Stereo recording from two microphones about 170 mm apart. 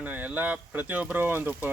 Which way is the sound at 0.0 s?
10° right (ahead or behind).